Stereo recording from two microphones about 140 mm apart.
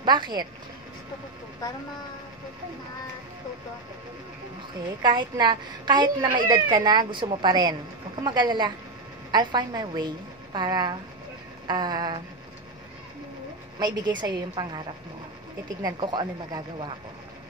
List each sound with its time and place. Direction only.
0.0 s speech: 30° right (ahead or behind)
5.0 s a woman's voice: 35° right (ahead or behind)
13.7 s a woman's voice: 30° right (ahead or behind)
15.8 s a woman's voice: 30° right (ahead or behind)